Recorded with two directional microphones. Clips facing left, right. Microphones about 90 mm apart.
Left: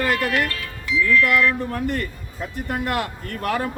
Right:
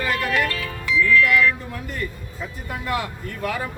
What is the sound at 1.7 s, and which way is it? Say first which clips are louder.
A man's voice: left 5 dB; 60° left (ahead or behind).